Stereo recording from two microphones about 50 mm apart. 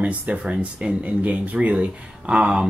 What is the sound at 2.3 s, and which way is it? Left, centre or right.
Speech, centre.